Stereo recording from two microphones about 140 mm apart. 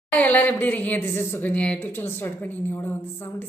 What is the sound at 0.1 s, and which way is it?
A woman's voice, 10° left (ahead or behind).